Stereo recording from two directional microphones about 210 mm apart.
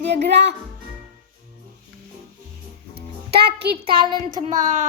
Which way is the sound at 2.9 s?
50° right (ahead or behind).